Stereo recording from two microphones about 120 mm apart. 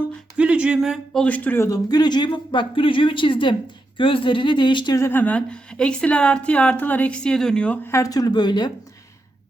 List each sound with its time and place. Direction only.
0.3 s speech: 10° right (ahead or behind)
1.2 s a woman's voice: 15° left (ahead or behind)
1.6 s speech: 30° left (ahead or behind)
4.9 s a woman's voice: 20° left (ahead or behind)
7.9 s speech: 25° left (ahead or behind)